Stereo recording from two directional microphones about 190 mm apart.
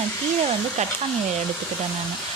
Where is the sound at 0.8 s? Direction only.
35° right (ahead or behind).